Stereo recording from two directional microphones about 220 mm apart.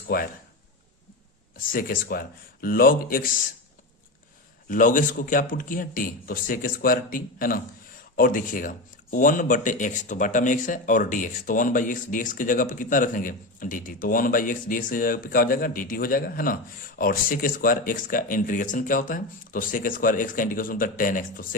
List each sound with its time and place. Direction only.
1.5 s speech: 40° left (ahead or behind)
4.7 s speech: 35° left (ahead or behind)